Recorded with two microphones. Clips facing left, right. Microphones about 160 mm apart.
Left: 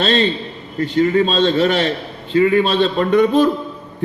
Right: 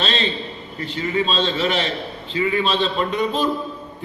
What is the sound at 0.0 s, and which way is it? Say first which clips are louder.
A man's voice: left 7 dB; 50° left (ahead or behind).